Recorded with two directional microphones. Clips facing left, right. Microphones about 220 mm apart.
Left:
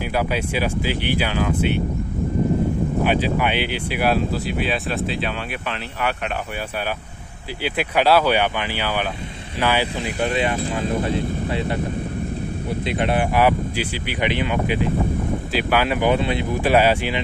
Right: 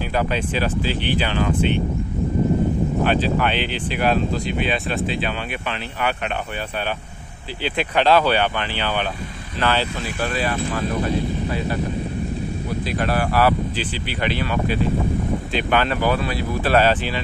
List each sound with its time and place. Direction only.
0.1 s speech: 10° left (ahead or behind)
3.0 s speech: 10° left (ahead or behind)
7.6 s speech: 10° left (ahead or behind); by 11.8 s 25° left (ahead or behind)
12.8 s speech: 20° left (ahead or behind)